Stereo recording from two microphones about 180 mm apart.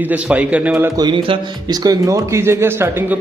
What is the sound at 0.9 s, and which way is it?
Speech, 25° right (ahead or behind).